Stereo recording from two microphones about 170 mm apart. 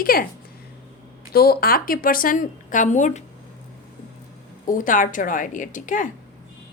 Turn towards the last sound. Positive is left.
turn(degrees=50)  # may be behind; listen again after turning